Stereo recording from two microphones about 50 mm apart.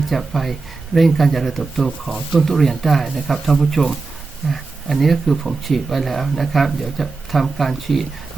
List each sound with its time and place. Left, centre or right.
0.1 s speech: centre